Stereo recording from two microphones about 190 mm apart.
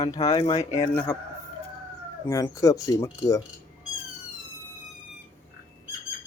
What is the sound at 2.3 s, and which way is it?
Speech, 20° left (ahead or behind).